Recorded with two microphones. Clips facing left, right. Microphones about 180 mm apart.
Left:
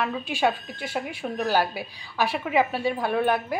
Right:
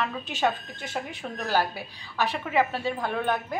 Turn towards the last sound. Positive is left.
turn(degrees=10)  # may be behind; listen again after turning